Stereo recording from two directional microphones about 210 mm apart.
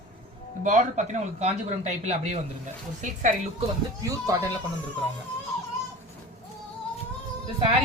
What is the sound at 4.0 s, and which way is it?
Speech, 15° right (ahead or behind).